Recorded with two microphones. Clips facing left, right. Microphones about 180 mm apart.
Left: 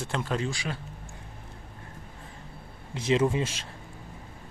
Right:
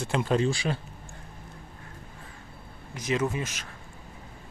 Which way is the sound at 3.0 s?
25° left (ahead or behind).